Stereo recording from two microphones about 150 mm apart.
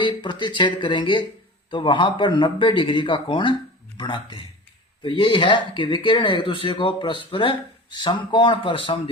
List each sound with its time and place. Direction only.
0.0 s speech: 30° left (ahead or behind)